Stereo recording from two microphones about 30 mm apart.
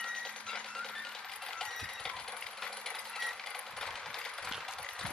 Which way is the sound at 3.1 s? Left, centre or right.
Centre.